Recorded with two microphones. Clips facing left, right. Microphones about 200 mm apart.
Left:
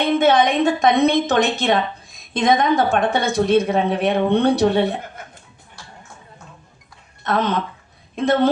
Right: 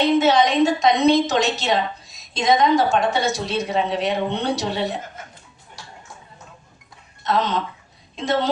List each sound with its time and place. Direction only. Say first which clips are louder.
0.0 s a woman's voice: left 1 dB; 55° left (ahead or behind)
7.3 s a woman's voice: left 1 dB; 55° left (ahead or behind)